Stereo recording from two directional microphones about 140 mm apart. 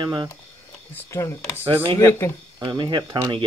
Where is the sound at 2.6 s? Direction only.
30° right (ahead or behind).